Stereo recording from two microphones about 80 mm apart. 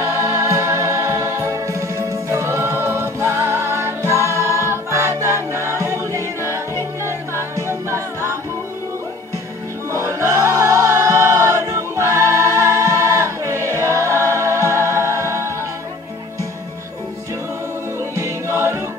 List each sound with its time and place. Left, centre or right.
0.0 s music: right
9.9 s music: right
18.1 s music: right